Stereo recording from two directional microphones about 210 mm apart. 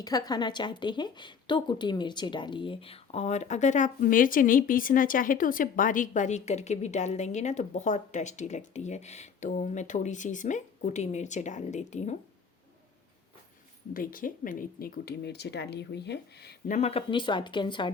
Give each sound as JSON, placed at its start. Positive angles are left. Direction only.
{"t": 0.0, "sound": "a woman's voice", "side_deg": 20}
{"t": 13.9, "sound": "speech", "side_deg": 40}
{"t": 16.7, "sound": "speech", "side_deg": 30}